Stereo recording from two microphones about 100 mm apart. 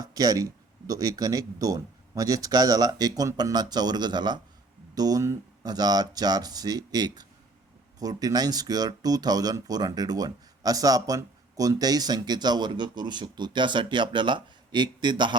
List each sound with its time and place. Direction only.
0.0 s speech: 40° right (ahead or behind)